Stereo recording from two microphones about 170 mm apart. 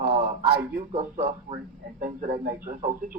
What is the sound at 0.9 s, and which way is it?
A man's voice, 45° right (ahead or behind).